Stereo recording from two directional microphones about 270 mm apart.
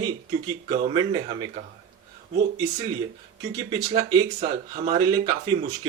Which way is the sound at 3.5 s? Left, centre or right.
Centre.